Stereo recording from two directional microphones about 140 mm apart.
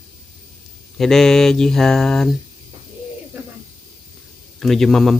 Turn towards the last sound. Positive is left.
turn(degrees=0)  # may be behind; listen again after turning